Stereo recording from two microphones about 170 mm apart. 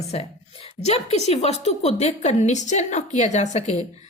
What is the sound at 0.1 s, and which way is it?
A woman's voice, 35° left (ahead or behind).